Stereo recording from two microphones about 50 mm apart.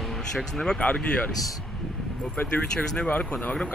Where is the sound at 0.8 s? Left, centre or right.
Left.